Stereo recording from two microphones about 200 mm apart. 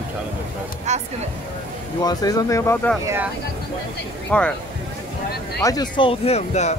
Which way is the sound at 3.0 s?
10° right (ahead or behind).